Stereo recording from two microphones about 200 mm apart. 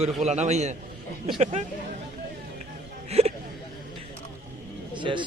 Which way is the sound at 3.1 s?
30° right (ahead or behind).